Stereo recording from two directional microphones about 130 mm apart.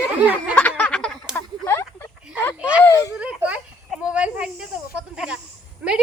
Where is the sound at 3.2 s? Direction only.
10° right (ahead or behind).